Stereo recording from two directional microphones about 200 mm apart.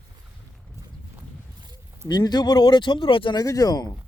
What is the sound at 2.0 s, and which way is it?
Speech, 20° left (ahead or behind).